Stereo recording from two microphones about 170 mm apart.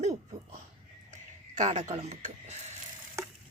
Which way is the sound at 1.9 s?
40° right (ahead or behind).